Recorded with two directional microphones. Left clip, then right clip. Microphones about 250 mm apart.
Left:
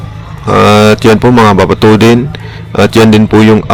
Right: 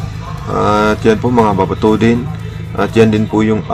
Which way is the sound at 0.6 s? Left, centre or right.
Left.